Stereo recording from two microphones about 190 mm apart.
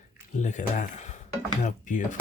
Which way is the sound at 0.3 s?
40° left (ahead or behind).